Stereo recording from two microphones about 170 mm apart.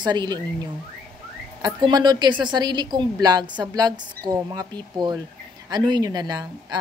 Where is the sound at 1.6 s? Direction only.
25° right (ahead or behind).